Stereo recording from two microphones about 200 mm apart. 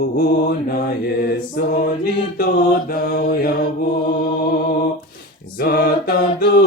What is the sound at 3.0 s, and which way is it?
Mantra, 50° left (ahead or behind).